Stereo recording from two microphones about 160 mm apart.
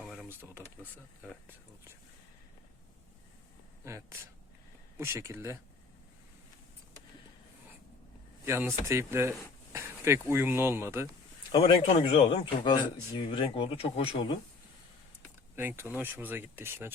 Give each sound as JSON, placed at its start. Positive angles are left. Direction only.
{"t": 0.0, "sound": "a sound", "side_deg": 0}
{"t": 3.8, "sound": "speech", "side_deg": -15}
{"t": 8.4, "sound": "speech", "side_deg": -15}
{"t": 11.5, "sound": "speech", "side_deg": 35}
{"t": 15.5, "sound": "speech", "side_deg": -15}